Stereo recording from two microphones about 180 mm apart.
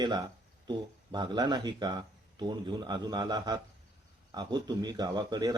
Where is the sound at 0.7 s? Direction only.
25° right (ahead or behind).